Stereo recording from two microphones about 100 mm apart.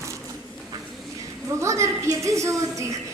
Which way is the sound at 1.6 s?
30° right (ahead or behind).